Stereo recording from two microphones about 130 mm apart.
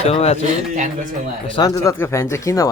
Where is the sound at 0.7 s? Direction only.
70° right (ahead or behind).